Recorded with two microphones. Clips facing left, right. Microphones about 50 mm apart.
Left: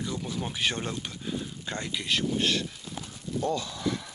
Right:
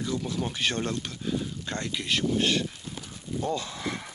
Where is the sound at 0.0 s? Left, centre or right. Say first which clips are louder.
Right 3 dB; centre.